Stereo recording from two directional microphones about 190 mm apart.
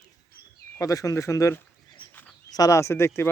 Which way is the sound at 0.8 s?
15° left (ahead or behind).